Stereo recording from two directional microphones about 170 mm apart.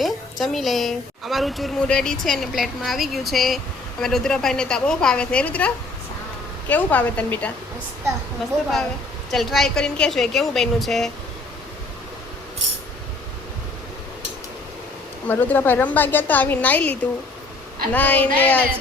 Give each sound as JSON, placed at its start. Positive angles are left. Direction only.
{"t": 0.0, "sound": "a woman's voice", "side_deg": 0}
{"t": 9.3, "sound": "a woman's voice", "side_deg": 0}
{"t": 15.3, "sound": "a woman's voice", "side_deg": 10}